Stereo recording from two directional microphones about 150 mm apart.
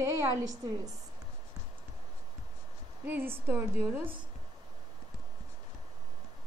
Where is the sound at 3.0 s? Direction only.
10° right (ahead or behind).